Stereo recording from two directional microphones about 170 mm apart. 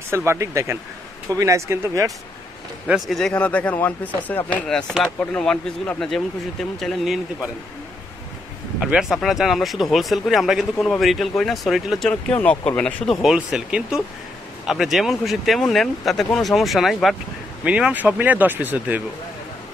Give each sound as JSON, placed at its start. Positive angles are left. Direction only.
{"t": 0.1, "sound": "speech", "side_deg": -15}
{"t": 2.9, "sound": "speech", "side_deg": 0}
{"t": 8.7, "sound": "speech", "side_deg": -5}